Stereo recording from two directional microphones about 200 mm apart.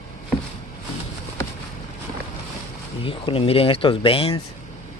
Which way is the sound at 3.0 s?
25° left (ahead or behind).